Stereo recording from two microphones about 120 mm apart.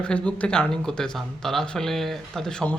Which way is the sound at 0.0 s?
10° left (ahead or behind).